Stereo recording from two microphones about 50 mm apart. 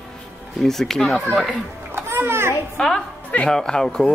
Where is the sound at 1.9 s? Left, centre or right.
Right.